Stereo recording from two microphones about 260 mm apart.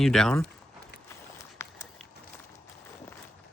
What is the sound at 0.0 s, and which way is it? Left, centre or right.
Speech, centre.